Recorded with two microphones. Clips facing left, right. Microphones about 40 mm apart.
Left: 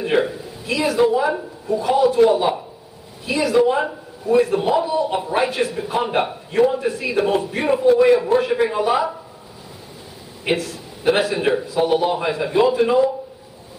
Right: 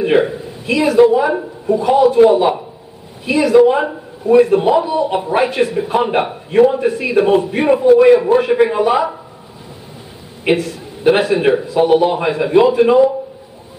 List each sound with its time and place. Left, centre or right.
0.0 s a man's voice: centre
10.4 s a man's voice: centre